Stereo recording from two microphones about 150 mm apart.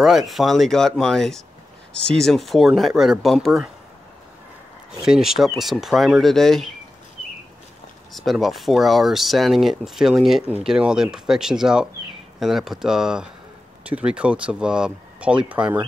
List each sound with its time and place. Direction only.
0.0 s speech: centre (ahead or behind)
5.0 s speech: 5° right (ahead or behind)
8.1 s speech: centre (ahead or behind)